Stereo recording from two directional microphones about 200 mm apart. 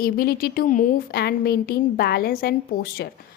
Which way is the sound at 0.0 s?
45° left (ahead or behind).